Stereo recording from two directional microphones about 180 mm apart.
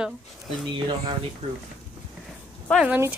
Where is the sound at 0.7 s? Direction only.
25° right (ahead or behind).